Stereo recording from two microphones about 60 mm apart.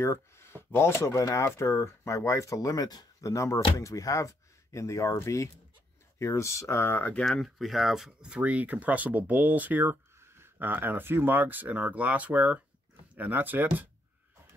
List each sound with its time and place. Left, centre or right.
0.0 s speech: left
1.1 s speech: left
6.8 s speech: left
7.2 s speech: centre
8.2 s speech: right
10.6 s speech: right